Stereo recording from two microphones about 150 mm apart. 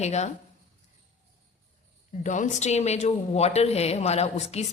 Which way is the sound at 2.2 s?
55° left (ahead or behind).